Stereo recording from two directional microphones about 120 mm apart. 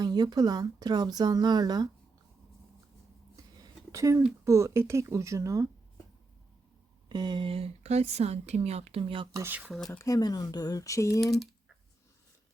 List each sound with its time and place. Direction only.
0.0 s speech: 35° right (ahead or behind)
3.3 s a sound: 25° right (ahead or behind)
4.4 s speech: 25° right (ahead or behind)
7.1 s speech: 35° right (ahead or behind)
9.2 s speech: 30° right (ahead or behind)
9.5 s speech: 10° right (ahead or behind)
9.7 s speech: 10° left (ahead or behind)
10.0 s speech: 30° left (ahead or behind)